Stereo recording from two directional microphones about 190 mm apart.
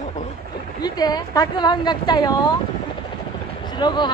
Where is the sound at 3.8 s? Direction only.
25° left (ahead or behind).